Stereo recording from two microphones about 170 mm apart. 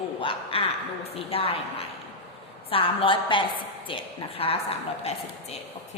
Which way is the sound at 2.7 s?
30° left (ahead or behind).